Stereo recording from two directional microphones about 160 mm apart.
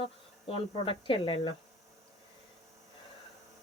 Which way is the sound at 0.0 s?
35° left (ahead or behind).